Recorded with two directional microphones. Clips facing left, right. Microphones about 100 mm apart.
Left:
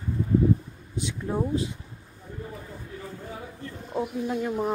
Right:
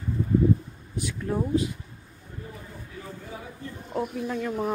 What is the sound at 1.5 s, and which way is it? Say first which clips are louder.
Speech: right 3 dB; 25° left (ahead or behind).